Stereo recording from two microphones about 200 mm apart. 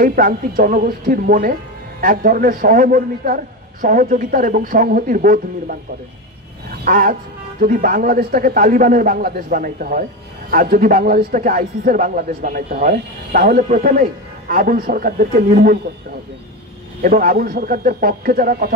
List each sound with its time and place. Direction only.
0.0 s speech: 45° right (ahead or behind)
6.8 s speech: 45° right (ahead or behind)
17.0 s speech: 45° right (ahead or behind)